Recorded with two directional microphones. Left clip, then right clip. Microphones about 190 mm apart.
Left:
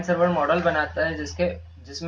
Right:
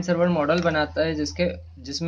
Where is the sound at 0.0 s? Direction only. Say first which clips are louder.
Left 1 dB; 50° right (ahead or behind).